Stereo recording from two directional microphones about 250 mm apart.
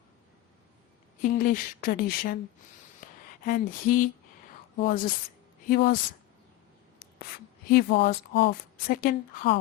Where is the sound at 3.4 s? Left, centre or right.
Left.